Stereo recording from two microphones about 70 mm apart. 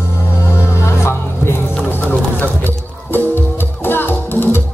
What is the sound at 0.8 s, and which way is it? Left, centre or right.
Music, left.